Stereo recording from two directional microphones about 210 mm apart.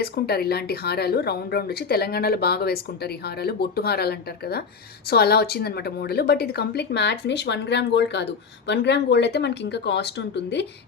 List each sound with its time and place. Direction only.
0.0 s a woman's voice: 50° left (ahead or behind)